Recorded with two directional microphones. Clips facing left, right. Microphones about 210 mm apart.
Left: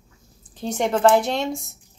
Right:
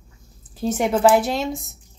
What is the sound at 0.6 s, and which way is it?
Speech, 5° right (ahead or behind).